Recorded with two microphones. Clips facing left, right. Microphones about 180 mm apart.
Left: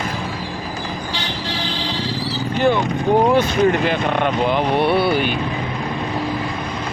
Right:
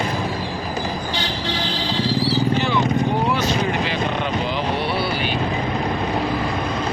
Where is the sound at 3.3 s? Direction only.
55° left (ahead or behind).